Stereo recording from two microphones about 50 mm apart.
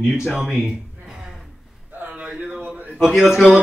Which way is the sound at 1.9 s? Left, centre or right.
Right.